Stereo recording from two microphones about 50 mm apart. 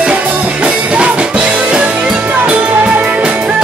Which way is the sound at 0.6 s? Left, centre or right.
Right.